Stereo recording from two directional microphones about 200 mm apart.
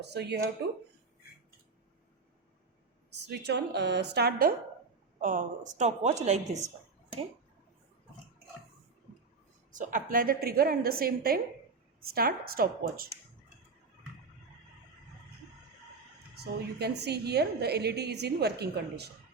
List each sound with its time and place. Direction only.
0.0 s a woman's voice: 55° right (ahead or behind)
3.1 s a woman's voice: 60° right (ahead or behind); by 6.7 s 35° right (ahead or behind)
9.7 s a woman's voice: 40° right (ahead or behind)
16.3 s a woman's voice: 55° right (ahead or behind)